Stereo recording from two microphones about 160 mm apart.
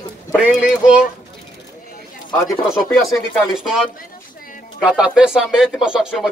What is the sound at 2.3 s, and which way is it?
Speech, 20° left (ahead or behind).